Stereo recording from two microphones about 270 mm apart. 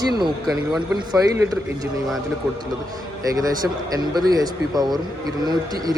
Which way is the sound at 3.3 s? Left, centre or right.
Centre.